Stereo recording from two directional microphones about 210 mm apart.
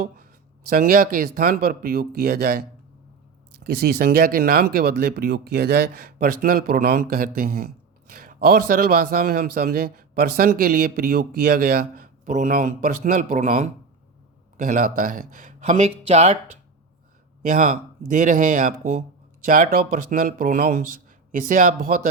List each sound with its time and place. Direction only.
0.7 s a man's voice: 45° right (ahead or behind)
17.4 s speech: 40° right (ahead or behind)